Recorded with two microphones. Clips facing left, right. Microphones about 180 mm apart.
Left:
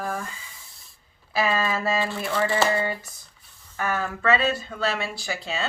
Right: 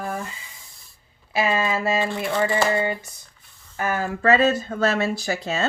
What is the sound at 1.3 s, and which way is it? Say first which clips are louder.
Speech: right 2 dB; 20° right (ahead or behind).